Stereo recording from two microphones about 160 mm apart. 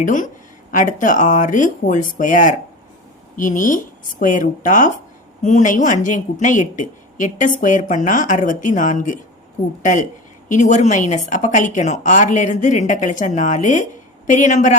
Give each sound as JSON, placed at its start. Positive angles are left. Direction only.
{"t": 0.0, "sound": "a woman's voice", "side_deg": 55}